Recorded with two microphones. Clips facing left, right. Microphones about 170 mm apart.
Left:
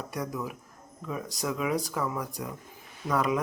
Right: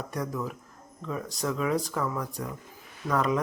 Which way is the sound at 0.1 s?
10° left (ahead or behind).